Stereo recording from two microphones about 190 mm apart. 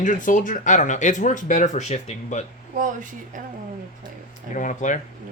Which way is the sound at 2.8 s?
45° right (ahead or behind).